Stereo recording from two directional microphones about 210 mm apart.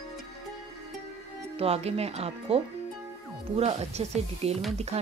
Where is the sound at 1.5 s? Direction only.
30° right (ahead or behind).